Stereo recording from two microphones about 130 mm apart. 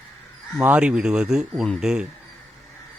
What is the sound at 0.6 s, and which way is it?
A man's voice, 10° right (ahead or behind).